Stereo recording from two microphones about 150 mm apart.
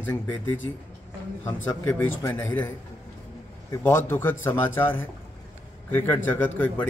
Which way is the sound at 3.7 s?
15° left (ahead or behind).